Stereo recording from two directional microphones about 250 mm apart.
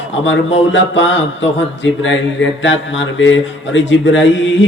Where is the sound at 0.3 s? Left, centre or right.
Left.